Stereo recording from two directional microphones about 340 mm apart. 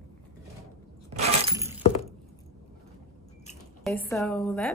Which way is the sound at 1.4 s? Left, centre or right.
Centre.